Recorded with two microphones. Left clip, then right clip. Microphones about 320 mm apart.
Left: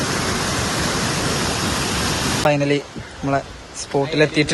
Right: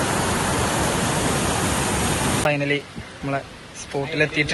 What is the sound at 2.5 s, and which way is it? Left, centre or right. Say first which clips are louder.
Speech: left 5 dB; centre.